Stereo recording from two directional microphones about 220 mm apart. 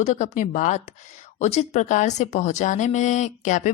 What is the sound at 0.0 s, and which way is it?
Speech, 35° left (ahead or behind).